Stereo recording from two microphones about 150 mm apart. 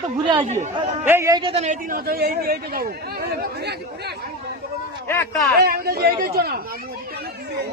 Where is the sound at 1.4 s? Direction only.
35° right (ahead or behind).